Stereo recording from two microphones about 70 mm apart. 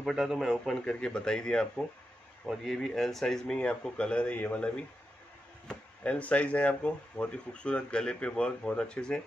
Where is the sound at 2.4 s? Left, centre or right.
Centre.